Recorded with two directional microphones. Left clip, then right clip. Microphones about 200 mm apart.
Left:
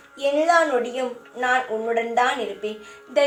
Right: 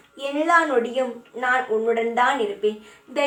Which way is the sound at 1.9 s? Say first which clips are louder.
Even; 30° left (ahead or behind).